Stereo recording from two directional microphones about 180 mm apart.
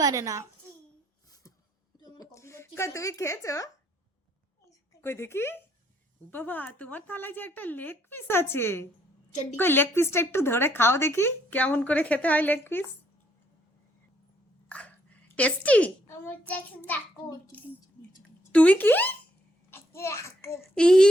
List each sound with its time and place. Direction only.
0.0 s a child's voice: 20° right (ahead or behind)
2.0 s a sound: 20° left (ahead or behind)
5.0 s a woman's voice: 15° left (ahead or behind)
14.7 s a child's voice: 5° left (ahead or behind)
18.2 s a sound: 5° left (ahead or behind)
19.7 s a child's voice: 15° left (ahead or behind)
20.7 s a child's voice: 5° left (ahead or behind)